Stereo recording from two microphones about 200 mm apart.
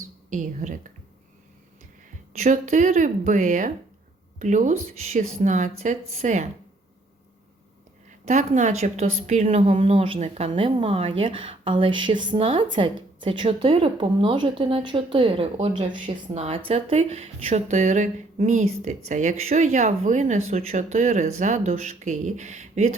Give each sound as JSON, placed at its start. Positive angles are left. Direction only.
{"t": 0.3, "sound": "speech", "side_deg": -40}
{"t": 2.3, "sound": "speech", "side_deg": -35}
{"t": 8.2, "sound": "a woman's voice", "side_deg": -35}